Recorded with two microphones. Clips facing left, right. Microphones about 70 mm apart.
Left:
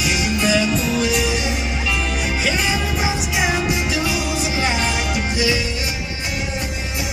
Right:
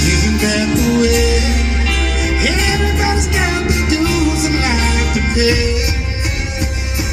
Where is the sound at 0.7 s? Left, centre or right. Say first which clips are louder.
Right 6 dB; right.